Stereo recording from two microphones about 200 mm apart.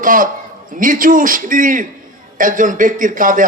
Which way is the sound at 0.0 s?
40° right (ahead or behind).